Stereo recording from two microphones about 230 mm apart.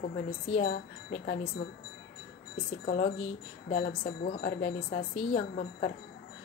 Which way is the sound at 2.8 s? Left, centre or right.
Left.